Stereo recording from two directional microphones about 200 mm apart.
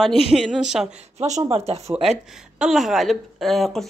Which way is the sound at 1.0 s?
35° right (ahead or behind).